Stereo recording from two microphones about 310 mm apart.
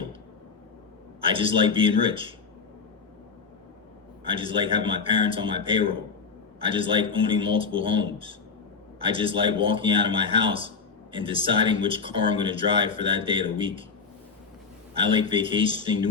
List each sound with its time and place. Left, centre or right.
1.2 s speech: centre
4.2 s speech: centre
14.9 s speech: centre